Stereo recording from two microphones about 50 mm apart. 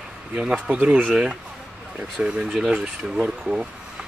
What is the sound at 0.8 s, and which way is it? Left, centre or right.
Speech, right.